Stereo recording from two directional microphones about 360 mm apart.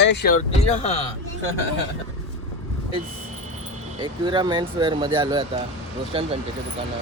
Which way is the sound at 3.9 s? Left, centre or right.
Centre.